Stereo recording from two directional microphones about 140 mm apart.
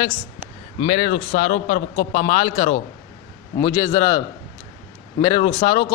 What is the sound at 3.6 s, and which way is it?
Speech, 25° left (ahead or behind).